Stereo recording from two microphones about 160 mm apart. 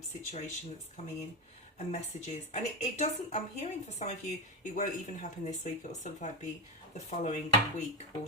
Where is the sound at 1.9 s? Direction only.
45° left (ahead or behind).